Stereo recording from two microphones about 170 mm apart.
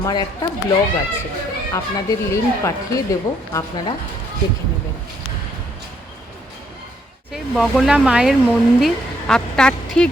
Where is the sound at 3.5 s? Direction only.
20° left (ahead or behind).